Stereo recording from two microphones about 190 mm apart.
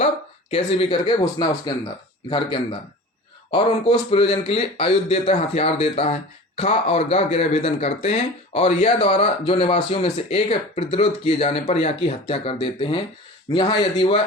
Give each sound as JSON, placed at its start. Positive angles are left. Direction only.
{"t": 0.5, "sound": "speech", "side_deg": 30}